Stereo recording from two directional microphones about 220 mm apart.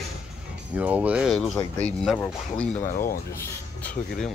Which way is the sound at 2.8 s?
40° left (ahead or behind).